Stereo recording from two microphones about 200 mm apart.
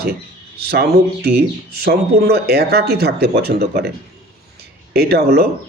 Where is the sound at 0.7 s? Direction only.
50° right (ahead or behind).